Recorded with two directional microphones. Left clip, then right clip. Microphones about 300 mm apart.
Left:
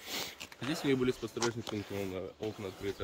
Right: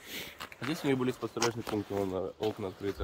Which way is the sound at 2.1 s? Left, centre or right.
Right.